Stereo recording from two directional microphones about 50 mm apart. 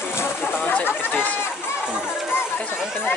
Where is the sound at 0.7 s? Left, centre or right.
Left.